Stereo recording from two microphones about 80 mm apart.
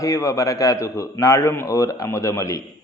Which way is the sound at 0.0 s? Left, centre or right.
Left.